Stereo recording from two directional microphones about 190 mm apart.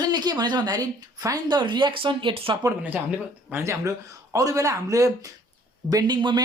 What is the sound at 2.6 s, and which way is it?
Speech, 10° right (ahead or behind).